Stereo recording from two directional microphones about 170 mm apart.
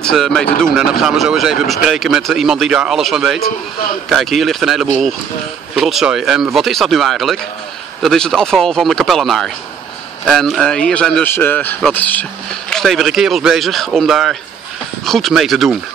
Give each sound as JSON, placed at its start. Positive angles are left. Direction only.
{"t": 0.0, "sound": "speech", "side_deg": 5}